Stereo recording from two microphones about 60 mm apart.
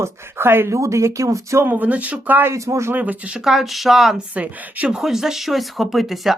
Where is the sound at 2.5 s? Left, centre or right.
Right.